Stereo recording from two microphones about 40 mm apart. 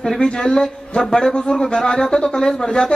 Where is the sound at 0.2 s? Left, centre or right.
Centre.